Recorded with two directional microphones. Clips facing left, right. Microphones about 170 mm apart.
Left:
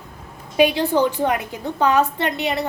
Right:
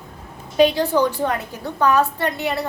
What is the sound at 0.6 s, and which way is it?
A woman's voice, 10° left (ahead or behind).